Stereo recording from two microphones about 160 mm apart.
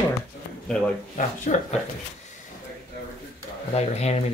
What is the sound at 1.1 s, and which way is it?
Speech, 50° left (ahead or behind).